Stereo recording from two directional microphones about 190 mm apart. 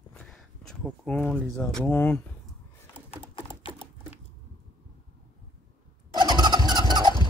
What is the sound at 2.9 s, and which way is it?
Typing, 30° left (ahead or behind).